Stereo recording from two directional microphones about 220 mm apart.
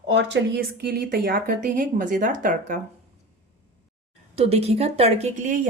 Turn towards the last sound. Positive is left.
turn(degrees=-35)  # may be behind; listen again after turning